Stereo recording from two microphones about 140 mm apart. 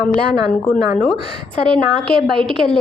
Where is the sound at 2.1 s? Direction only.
5° left (ahead or behind).